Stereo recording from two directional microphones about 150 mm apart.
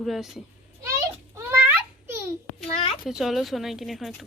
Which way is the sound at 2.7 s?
40° left (ahead or behind).